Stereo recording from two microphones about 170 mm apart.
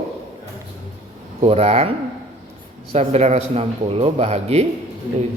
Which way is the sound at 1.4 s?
35° right (ahead or behind).